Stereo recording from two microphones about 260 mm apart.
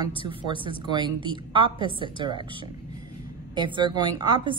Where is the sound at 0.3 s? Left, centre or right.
Centre.